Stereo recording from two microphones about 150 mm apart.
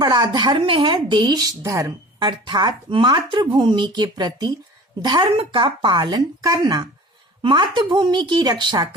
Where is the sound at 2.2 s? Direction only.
30° right (ahead or behind).